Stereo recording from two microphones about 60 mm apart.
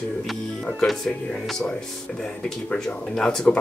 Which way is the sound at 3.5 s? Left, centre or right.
Centre.